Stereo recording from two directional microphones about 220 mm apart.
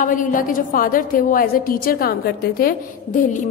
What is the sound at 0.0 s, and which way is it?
A woman's voice, 40° left (ahead or behind).